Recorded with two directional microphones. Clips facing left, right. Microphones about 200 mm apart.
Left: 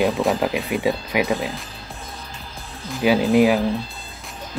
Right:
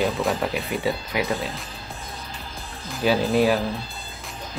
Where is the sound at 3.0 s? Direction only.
15° left (ahead or behind).